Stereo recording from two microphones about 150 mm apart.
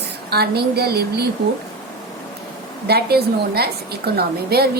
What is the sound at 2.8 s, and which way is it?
A woman's voice, 90° right.